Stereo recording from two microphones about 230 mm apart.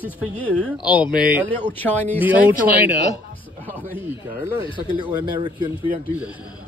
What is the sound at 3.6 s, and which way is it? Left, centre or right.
Speech, centre.